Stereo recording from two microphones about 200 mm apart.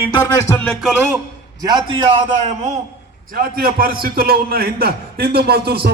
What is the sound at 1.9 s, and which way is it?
Speech, 30° right (ahead or behind).